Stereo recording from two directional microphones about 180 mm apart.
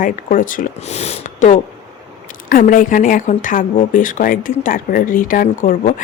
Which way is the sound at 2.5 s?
50° left (ahead or behind).